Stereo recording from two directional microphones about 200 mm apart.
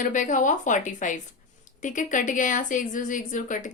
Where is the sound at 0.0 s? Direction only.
40° left (ahead or behind).